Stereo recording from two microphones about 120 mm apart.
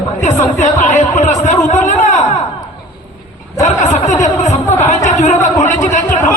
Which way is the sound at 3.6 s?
80° left.